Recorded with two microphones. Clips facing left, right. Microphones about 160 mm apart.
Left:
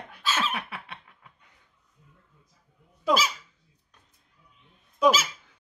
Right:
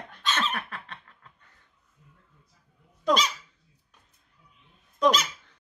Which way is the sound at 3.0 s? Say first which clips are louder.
Even; 5° left (ahead or behind).